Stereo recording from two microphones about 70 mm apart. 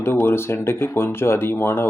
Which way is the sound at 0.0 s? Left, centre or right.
Left.